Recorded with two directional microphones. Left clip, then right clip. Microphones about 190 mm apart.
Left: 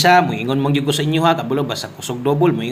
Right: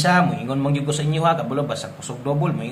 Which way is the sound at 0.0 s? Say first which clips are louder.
Left 6 dB; 30° left (ahead or behind).